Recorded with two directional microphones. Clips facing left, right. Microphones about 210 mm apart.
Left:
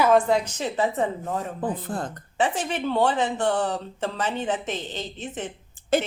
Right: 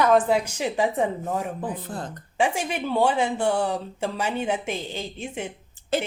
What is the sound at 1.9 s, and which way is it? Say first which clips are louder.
Speech: left 3 dB; 50° left (ahead or behind).